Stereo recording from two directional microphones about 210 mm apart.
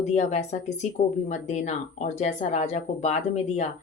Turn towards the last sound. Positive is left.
turn(degrees=30)  # may be behind; listen again after turning